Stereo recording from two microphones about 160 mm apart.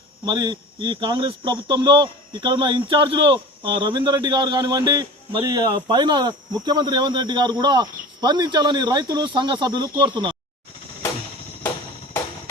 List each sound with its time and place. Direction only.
0.3 s a man's voice: 30° right (ahead or behind)